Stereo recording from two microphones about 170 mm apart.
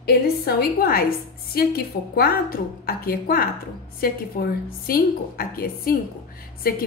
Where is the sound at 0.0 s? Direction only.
65° left (ahead or behind).